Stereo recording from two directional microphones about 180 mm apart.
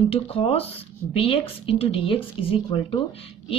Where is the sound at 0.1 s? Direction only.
35° left (ahead or behind).